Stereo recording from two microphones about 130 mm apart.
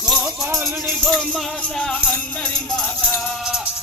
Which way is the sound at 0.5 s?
Centre (ahead or behind).